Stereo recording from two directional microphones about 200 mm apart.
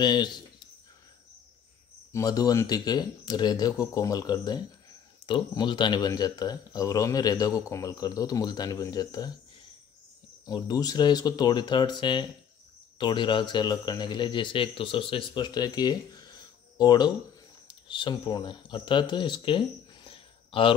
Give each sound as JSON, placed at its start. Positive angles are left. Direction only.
{"t": 0.0, "sound": "speech", "side_deg": 20}
{"t": 2.1, "sound": "speech", "side_deg": 20}
{"t": 10.4, "sound": "speech", "side_deg": 20}